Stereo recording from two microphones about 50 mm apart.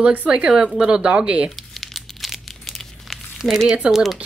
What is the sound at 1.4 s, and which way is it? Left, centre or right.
Crumpling, centre.